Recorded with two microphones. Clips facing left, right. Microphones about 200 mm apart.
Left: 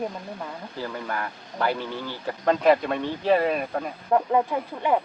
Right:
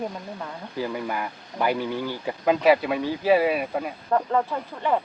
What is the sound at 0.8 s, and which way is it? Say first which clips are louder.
Speech: right 3 dB; 10° right (ahead or behind).